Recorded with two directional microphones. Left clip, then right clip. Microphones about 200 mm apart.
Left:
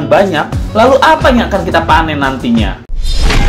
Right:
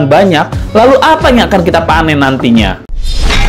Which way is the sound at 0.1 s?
40° right (ahead or behind).